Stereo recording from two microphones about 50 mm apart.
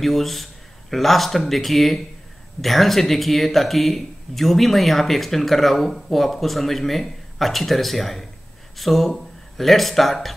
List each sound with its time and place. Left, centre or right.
0.0 s a man's voice: centre